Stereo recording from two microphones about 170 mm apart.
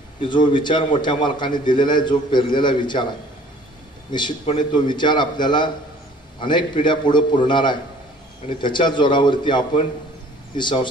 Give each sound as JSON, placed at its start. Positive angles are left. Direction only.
{"t": 0.3, "sound": "a man's voice", "side_deg": 25}
{"t": 4.1, "sound": "a man's voice", "side_deg": 25}